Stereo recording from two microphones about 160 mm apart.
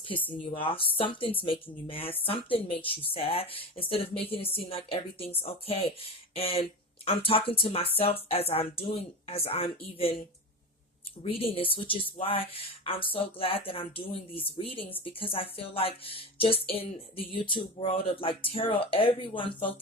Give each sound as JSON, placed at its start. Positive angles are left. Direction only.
{"t": 0.6, "sound": "speech", "side_deg": 35}